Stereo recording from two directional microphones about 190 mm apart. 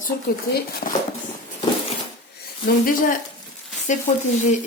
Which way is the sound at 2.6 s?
50° left (ahead or behind).